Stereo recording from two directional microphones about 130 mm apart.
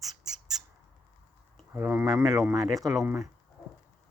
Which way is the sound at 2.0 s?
30° right (ahead or behind).